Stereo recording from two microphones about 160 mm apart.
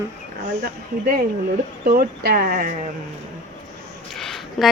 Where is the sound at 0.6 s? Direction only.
65° right (ahead or behind).